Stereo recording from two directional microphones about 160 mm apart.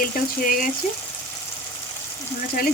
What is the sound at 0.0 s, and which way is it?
Speech, 60° left (ahead or behind).